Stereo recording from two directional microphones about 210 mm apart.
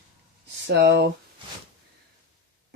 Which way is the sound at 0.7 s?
50° right (ahead or behind).